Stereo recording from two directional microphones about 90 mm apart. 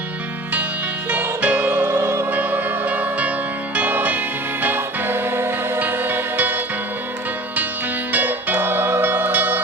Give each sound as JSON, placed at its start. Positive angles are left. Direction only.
{"t": 1.1, "sound": "music", "side_deg": -15}
{"t": 8.1, "sound": "music", "side_deg": -20}